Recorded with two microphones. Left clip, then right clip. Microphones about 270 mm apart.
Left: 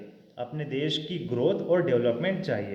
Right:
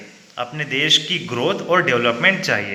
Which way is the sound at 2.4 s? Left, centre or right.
Centre.